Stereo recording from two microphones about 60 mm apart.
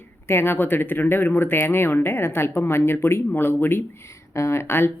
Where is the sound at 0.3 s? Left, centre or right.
Left.